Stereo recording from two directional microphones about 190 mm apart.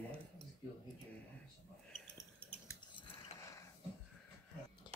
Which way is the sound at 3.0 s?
25° left (ahead or behind).